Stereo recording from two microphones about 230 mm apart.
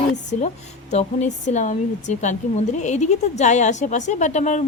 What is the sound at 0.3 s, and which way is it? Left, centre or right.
Speech, left.